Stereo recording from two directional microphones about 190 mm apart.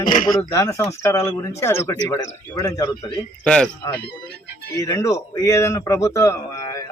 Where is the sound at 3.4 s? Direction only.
5° left (ahead or behind).